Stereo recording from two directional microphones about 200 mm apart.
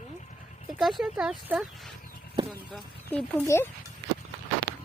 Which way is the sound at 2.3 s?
25° right (ahead or behind).